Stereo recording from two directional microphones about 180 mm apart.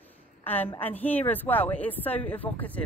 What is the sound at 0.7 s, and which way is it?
Speech, 10° left (ahead or behind).